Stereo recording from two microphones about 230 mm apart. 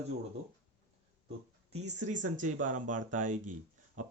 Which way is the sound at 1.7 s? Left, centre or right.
Right.